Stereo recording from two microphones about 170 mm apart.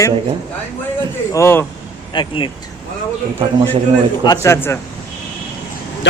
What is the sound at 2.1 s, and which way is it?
Speech, 30° left (ahead or behind).